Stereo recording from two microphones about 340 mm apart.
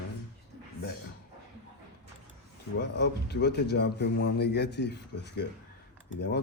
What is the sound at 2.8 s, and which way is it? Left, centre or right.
A man's voice, left.